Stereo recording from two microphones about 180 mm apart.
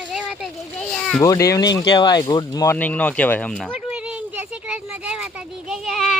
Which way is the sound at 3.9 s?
5° right (ahead or behind).